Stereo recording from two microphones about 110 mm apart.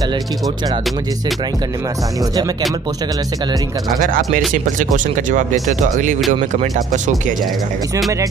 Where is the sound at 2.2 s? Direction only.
35° right (ahead or behind).